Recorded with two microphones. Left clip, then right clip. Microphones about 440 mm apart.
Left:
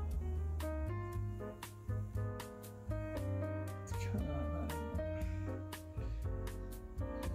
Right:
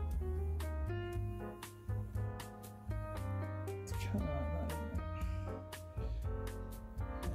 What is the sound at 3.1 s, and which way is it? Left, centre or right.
Music, centre.